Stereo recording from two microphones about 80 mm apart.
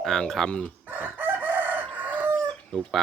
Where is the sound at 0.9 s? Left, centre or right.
Right.